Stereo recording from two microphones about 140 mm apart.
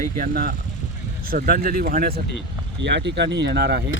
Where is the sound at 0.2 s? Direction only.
90° right.